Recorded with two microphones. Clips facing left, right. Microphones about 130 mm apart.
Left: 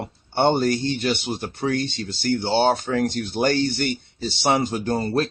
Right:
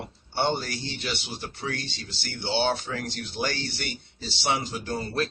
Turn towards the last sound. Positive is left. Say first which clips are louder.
# left 7 dB
turn(degrees=45)  # may be behind; listen again after turning